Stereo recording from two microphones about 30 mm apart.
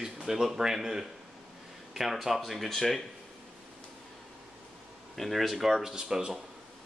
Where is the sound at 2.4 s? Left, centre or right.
Centre.